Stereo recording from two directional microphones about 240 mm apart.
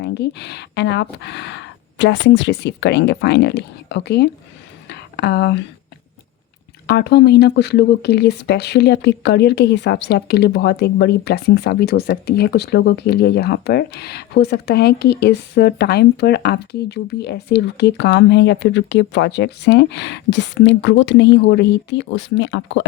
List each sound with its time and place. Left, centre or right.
0.0 s speech: left
4.9 s a sound: left
6.8 s speech: left